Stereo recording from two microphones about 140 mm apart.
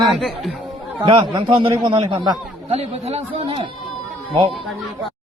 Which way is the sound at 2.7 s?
50° right (ahead or behind).